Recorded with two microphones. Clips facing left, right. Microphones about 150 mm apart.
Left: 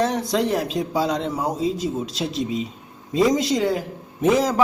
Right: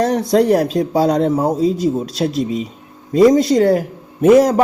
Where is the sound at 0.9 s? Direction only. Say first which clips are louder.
Right 9 dB; 45° right (ahead or behind).